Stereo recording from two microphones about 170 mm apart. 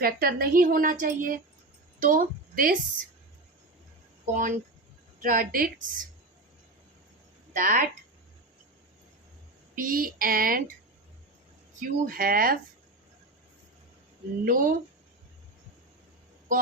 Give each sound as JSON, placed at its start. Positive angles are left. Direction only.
{"t": 0.0, "sound": "a woman's voice", "side_deg": -60}
{"t": 4.3, "sound": "a woman's voice", "side_deg": -50}
{"t": 7.5, "sound": "a woman's voice", "side_deg": -50}
{"t": 9.7, "sound": "a woman's voice", "side_deg": -55}
{"t": 11.8, "sound": "a woman's voice", "side_deg": -55}
{"t": 14.4, "sound": "a woman's voice", "side_deg": -55}